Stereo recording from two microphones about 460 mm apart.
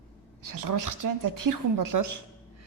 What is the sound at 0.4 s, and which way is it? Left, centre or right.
A woman's voice, right.